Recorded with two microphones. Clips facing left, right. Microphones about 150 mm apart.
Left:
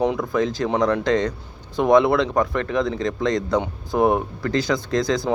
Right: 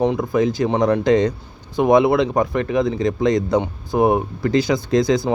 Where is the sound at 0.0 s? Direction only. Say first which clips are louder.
Right 3 dB; centre (ahead or behind).